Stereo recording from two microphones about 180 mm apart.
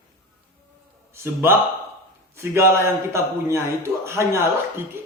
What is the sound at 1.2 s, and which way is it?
A man's voice, 15° right (ahead or behind).